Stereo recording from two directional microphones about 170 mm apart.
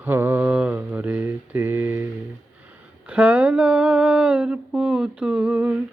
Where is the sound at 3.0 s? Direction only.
5° right (ahead or behind).